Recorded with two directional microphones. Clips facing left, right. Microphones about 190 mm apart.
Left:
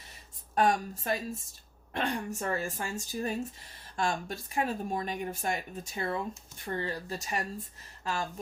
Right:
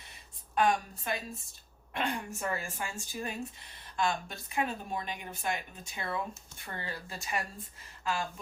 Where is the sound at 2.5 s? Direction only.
40° left (ahead or behind).